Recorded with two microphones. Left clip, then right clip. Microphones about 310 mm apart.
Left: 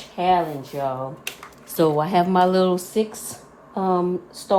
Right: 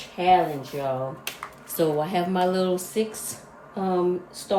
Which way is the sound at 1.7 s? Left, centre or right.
Left.